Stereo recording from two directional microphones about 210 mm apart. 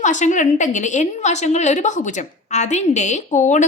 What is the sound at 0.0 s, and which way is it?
A woman's voice, 35° left (ahead or behind).